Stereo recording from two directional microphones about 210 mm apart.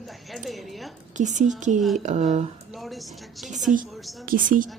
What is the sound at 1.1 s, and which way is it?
A woman's voice, 35° right (ahead or behind).